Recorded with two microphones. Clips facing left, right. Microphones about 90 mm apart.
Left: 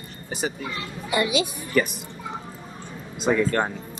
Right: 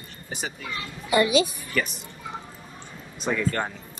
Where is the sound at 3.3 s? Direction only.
25° left (ahead or behind).